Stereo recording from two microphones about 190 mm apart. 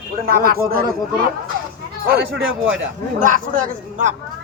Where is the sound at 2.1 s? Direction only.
55° right (ahead or behind).